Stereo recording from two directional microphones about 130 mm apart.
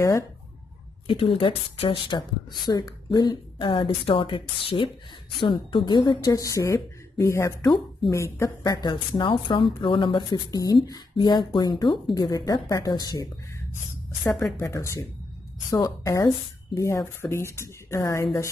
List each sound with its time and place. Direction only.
1.0 s a woman's voice: 45° left (ahead or behind); by 8.7 s 25° left (ahead or behind)
8.8 s a woman's voice: 35° left (ahead or behind)
14.6 s speech: 25° left (ahead or behind)